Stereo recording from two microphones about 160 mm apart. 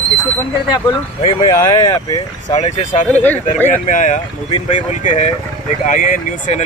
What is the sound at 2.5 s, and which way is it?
Speech, 45° left (ahead or behind).